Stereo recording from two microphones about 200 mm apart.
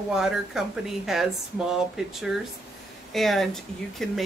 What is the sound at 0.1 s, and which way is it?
Speech, centre (ahead or behind).